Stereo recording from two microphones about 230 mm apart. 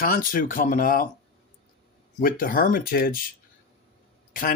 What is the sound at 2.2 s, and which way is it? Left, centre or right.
Speech, left.